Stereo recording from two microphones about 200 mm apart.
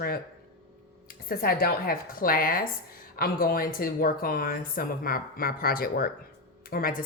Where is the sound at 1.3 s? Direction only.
50° left (ahead or behind).